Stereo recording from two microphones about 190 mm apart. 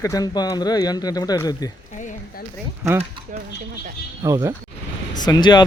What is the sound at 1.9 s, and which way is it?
Speech, 40° left (ahead or behind).